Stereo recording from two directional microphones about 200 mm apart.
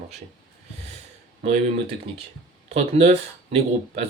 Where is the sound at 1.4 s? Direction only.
30° right (ahead or behind).